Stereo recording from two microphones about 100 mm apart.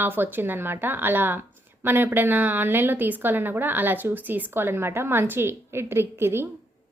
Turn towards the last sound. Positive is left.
turn(degrees=-25)  # may be behind; listen again after turning